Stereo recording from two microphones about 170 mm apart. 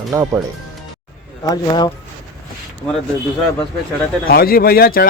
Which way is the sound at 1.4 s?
25° left (ahead or behind).